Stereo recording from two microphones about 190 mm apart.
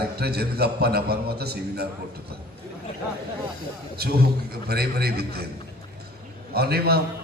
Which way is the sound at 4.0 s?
55° right (ahead or behind).